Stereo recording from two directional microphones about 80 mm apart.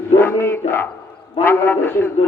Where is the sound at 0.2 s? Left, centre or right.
Left.